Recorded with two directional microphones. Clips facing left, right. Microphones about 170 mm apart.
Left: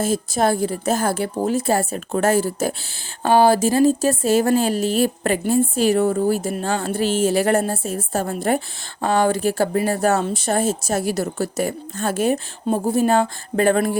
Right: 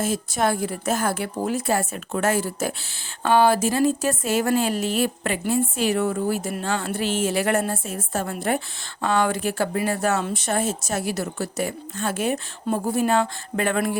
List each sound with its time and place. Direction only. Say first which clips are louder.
0.0 s speech: left 4 dB; 30° left (ahead or behind)
12.6 s a woman's voice: left 4 dB; 25° left (ahead or behind)